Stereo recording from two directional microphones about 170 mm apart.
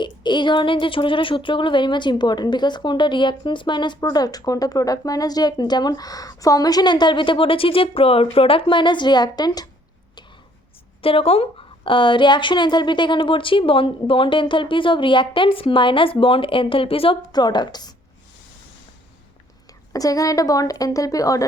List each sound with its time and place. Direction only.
0.0 s a woman's voice: 25° left (ahead or behind)
11.0 s a woman's voice: 35° left (ahead or behind)
19.9 s a woman's voice: 20° left (ahead or behind)